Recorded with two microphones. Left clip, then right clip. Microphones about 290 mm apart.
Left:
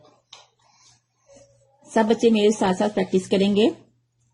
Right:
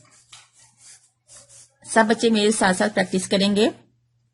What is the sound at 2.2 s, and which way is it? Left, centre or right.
Speech, right.